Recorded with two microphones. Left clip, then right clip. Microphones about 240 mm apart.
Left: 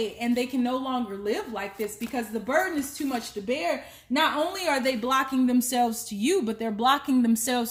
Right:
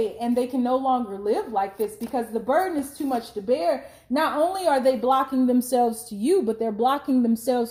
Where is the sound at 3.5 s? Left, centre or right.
Left.